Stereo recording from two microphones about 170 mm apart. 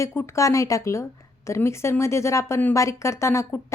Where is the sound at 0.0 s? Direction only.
15° left (ahead or behind).